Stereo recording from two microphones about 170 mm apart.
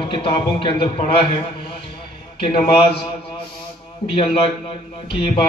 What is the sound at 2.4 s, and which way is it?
Speech, 30° left (ahead or behind).